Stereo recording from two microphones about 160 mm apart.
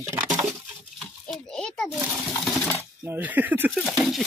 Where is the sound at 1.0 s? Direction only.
5° left (ahead or behind).